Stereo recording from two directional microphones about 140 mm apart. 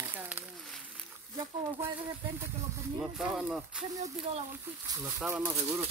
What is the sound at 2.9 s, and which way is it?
Speech, 5° right (ahead or behind).